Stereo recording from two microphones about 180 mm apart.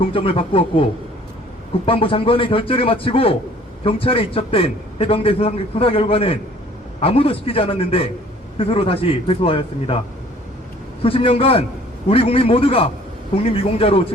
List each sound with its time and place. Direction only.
0.0 s a man's voice: 30° left (ahead or behind)
11.0 s a man's voice: 30° left (ahead or behind)